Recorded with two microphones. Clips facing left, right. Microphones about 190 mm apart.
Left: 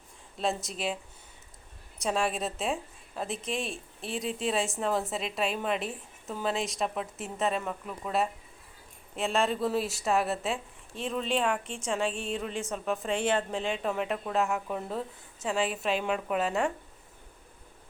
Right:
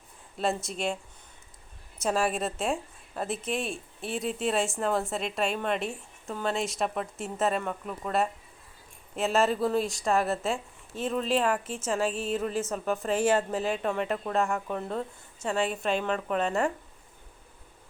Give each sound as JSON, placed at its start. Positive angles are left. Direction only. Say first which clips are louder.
{"t": 0.3, "sound": "a woman's voice", "louder": "right 2 dB", "side_deg": 0}
{"t": 2.0, "sound": "a woman's voice", "louder": "right 2 dB", "side_deg": 0}